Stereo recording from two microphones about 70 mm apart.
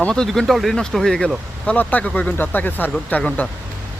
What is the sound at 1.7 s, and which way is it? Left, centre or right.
Speech, centre.